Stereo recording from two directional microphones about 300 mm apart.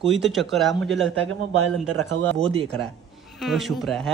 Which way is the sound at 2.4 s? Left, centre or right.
Centre.